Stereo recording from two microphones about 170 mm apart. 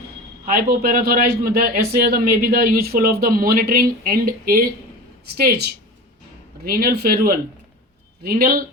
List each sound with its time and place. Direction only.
0.4 s a man's voice: 60° right (ahead or behind)